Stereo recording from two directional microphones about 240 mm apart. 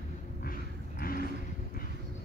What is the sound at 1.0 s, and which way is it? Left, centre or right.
Vehicle, left.